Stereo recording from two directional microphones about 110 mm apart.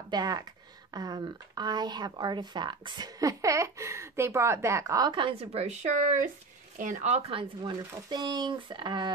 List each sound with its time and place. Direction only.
0.1 s a woman's voice: 35° right (ahead or behind)
5.0 s speech: 50° right (ahead or behind)
5.5 s speech: 85° right
7.0 s speech: 75° right (ahead or behind)
7.6 s speech: 45° right (ahead or behind)